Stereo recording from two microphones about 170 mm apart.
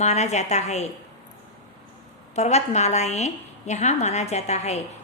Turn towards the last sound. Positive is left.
turn(degrees=40)  # may be behind; listen again after turning